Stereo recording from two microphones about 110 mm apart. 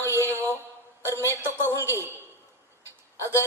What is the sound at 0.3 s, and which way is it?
Mantra, 20° right (ahead or behind).